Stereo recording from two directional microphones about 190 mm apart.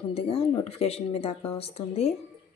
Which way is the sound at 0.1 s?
30° left (ahead or behind).